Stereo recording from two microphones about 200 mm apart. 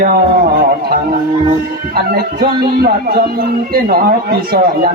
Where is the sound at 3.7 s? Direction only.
50° right (ahead or behind).